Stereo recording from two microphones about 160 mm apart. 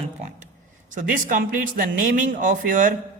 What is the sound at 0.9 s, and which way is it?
Speech, 55° right (ahead or behind).